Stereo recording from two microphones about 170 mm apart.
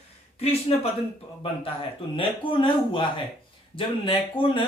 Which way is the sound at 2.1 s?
30° left (ahead or behind).